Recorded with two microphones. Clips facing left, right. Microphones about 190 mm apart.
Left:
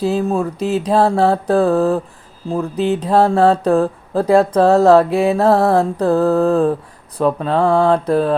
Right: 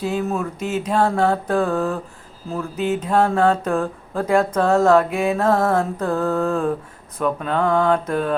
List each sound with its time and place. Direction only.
0.0 s speech: 30° left (ahead or behind)